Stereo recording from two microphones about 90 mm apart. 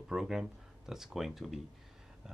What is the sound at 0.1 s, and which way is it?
Speech, 5° right (ahead or behind).